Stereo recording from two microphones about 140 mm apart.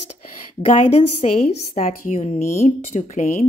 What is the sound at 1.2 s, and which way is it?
Speech, 50° left (ahead or behind).